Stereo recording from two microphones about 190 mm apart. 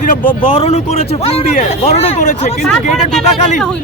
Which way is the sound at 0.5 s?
35° left (ahead or behind).